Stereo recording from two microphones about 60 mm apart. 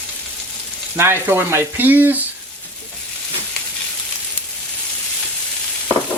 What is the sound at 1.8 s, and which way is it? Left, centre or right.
Speech, right.